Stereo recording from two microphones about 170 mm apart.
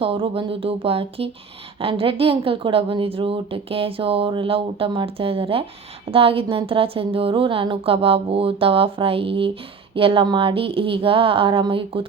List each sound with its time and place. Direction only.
0.0 s speech: 30° right (ahead or behind)